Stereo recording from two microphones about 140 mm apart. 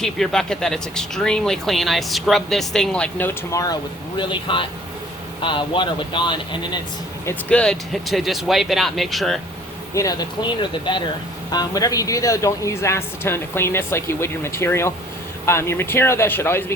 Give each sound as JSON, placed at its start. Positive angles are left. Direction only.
{"t": 0.0, "sound": "speech", "side_deg": 5}
{"t": 4.2, "sound": "speech", "side_deg": 35}
{"t": 7.3, "sound": "speech", "side_deg": 5}
{"t": 9.9, "sound": "speech", "side_deg": 25}